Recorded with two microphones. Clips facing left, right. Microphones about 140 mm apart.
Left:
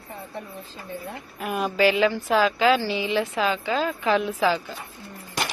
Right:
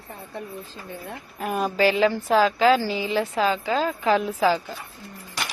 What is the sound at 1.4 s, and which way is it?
Speech, 40° right (ahead or behind).